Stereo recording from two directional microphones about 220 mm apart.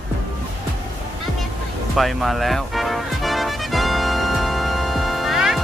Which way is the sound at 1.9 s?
Centre (ahead or behind).